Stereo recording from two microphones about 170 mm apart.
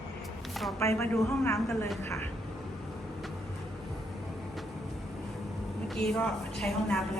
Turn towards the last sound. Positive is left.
turn(degrees=5)  # may be behind; listen again after turning